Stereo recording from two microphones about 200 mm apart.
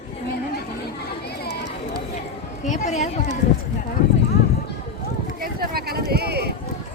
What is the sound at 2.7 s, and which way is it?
Speech, 35° left (ahead or behind).